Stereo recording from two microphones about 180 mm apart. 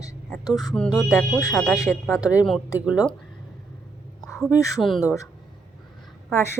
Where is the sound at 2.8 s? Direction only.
5° right (ahead or behind).